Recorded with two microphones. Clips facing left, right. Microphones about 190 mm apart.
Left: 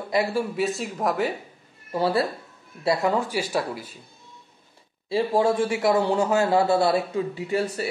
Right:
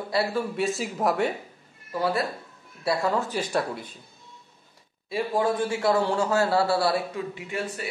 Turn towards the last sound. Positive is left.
turn(degrees=35)  # may be behind; listen again after turning